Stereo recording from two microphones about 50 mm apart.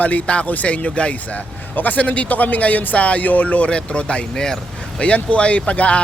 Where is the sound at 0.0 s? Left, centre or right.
Left.